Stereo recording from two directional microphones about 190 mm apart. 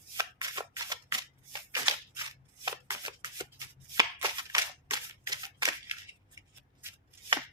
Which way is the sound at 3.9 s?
20° right (ahead or behind).